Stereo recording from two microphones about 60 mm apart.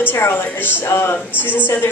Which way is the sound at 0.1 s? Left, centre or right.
Left.